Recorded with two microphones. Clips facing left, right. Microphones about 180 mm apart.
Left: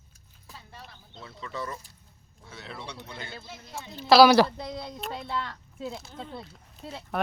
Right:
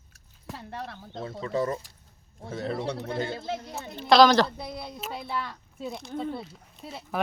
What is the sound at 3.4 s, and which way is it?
Speech, 80° right.